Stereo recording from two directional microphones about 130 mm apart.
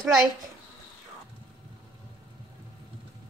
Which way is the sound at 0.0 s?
5° right (ahead or behind).